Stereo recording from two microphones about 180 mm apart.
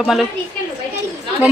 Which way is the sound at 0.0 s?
Centre (ahead or behind).